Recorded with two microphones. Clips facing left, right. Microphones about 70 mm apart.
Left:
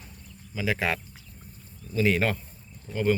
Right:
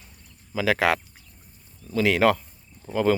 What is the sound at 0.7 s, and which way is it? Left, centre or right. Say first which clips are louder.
Speech: right 6 dB; right.